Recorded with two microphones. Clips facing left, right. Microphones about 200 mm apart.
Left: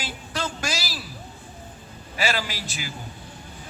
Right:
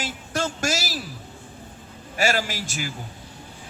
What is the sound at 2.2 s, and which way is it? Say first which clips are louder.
Speech: right 3 dB; 45° right (ahead or behind).